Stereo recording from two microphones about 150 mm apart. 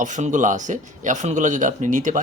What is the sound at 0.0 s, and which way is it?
Speech, 55° right (ahead or behind).